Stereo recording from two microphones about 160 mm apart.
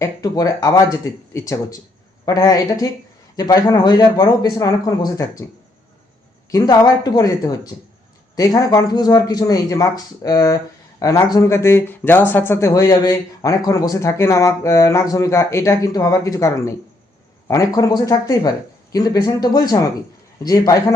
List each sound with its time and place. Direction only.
0.0 s speech: 20° left (ahead or behind)
6.5 s speech: 25° left (ahead or behind)